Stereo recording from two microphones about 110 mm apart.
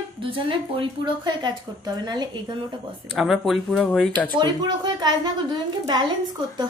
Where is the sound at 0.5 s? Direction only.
50° right (ahead or behind).